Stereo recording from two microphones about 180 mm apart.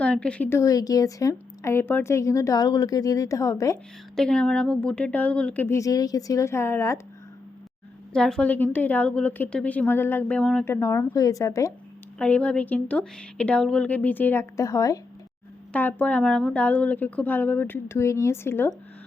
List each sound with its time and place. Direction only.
0.0 s a woman's voice: 5° left (ahead or behind)
4.1 s a woman's voice: 5° left (ahead or behind)
8.1 s a woman's voice: 5° left (ahead or behind)
12.2 s a woman's voice: 5° left (ahead or behind)